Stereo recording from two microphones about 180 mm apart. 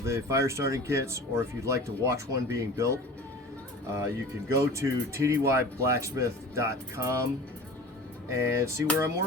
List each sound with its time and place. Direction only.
0.0 s speech: 15° right (ahead or behind)
8.3 s speech: 15° right (ahead or behind)